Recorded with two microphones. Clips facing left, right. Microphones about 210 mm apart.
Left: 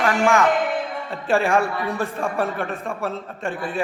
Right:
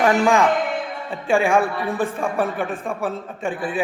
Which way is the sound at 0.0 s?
20° right (ahead or behind).